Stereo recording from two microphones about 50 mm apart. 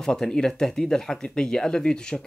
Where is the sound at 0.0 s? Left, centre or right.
Centre.